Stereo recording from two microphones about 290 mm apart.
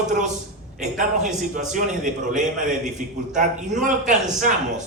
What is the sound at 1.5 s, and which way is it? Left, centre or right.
A man's voice, right.